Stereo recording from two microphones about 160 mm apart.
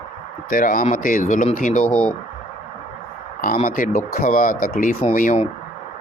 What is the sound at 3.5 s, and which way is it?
Speech, 55° left (ahead or behind).